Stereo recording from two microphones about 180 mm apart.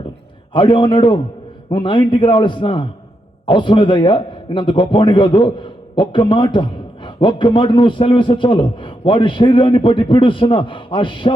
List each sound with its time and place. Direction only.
0.5 s a man's voice: 25° left (ahead or behind)